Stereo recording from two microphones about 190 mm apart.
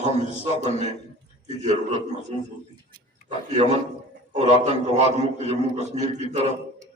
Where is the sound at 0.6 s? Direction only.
40° right (ahead or behind).